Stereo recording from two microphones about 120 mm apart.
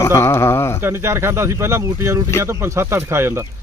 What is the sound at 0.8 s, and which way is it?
Speech, 20° right (ahead or behind).